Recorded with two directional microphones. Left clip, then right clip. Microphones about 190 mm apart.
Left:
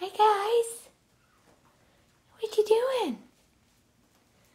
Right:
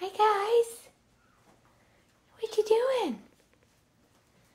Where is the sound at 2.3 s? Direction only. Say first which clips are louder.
Left 2 dB; 10° left (ahead or behind).